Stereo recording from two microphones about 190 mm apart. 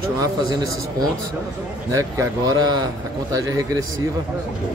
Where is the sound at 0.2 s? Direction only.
20° right (ahead or behind).